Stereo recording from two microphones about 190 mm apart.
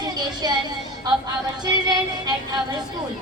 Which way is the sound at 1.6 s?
20° right (ahead or behind).